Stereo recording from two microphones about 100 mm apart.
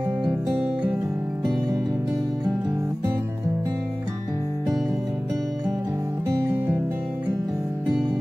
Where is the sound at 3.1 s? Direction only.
20° right (ahead or behind).